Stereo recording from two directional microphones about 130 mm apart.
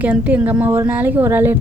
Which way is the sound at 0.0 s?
10° right (ahead or behind).